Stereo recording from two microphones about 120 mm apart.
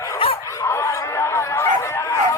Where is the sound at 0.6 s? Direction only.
25° left (ahead or behind).